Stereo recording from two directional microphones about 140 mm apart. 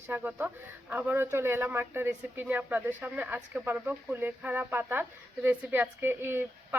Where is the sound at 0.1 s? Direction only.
15° right (ahead or behind).